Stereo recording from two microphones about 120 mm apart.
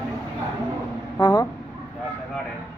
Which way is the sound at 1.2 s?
30° left (ahead or behind).